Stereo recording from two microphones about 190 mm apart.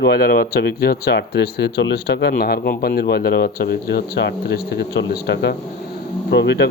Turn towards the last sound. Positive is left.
turn(degrees=65)  # may be behind; listen again after turning